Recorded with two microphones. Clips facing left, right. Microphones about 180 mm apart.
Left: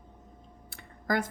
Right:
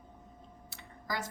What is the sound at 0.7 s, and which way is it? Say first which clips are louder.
Clicking: left 9 dB; 55° left (ahead or behind).